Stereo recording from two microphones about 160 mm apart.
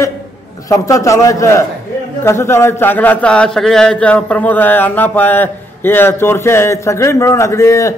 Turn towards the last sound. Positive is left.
turn(degrees=20)  # may be behind; listen again after turning